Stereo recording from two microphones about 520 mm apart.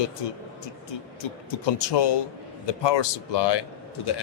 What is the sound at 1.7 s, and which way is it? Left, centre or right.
Speech, left.